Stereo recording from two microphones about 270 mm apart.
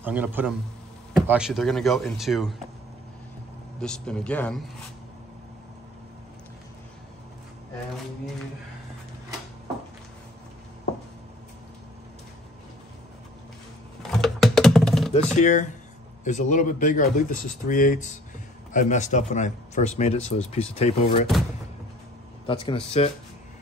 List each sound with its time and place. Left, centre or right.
0.0 s speech: centre
3.8 s speech: centre
14.2 s typing: centre
15.3 s speech: left
22.5 s speech: centre